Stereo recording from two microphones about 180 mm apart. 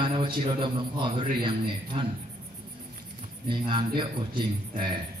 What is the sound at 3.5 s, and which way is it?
Speech, 25° right (ahead or behind).